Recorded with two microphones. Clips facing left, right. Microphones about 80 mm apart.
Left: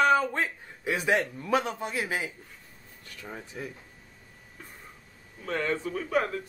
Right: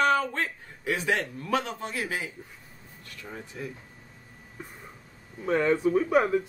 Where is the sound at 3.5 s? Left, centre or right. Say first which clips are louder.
Right 1 dB; centre.